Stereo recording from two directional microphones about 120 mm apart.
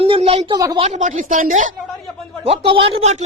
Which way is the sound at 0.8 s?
85° right.